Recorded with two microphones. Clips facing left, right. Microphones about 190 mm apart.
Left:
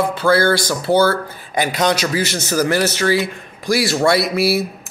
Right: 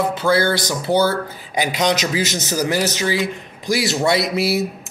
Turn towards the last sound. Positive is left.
turn(degrees=-20)  # may be behind; listen again after turning